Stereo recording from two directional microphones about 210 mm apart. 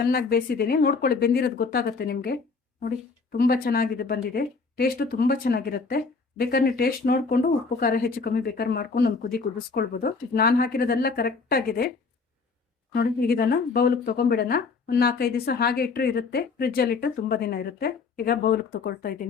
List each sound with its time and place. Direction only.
0.1 s speech: 45° left (ahead or behind)
12.9 s speech: 45° left (ahead or behind)